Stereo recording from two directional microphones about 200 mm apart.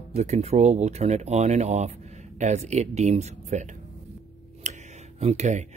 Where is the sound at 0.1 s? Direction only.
35° right (ahead or behind).